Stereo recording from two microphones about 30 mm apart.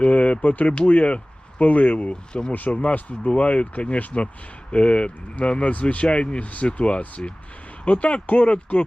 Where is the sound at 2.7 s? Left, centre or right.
Left.